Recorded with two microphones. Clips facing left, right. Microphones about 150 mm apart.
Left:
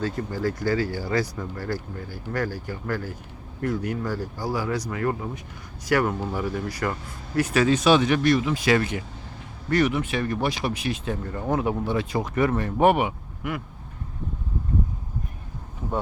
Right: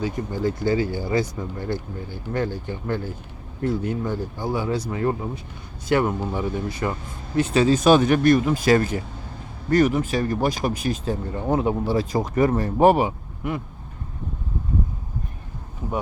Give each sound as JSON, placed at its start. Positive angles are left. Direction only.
{"t": 0.0, "sound": "speech", "side_deg": -15}
{"t": 7.8, "sound": "speech", "side_deg": -45}